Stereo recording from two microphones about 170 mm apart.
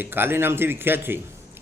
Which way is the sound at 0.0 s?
10° right (ahead or behind).